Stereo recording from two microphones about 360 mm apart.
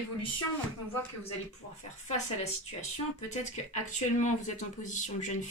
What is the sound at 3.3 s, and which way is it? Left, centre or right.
A woman's voice, centre.